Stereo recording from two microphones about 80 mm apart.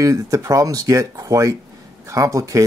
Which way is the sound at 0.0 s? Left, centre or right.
Right.